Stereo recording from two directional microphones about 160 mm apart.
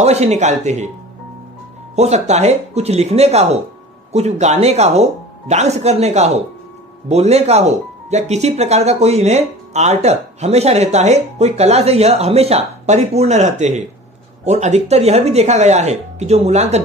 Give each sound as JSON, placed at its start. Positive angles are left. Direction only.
{"t": 0.0, "sound": "speech", "side_deg": -45}
{"t": 2.0, "sound": "speech", "side_deg": -45}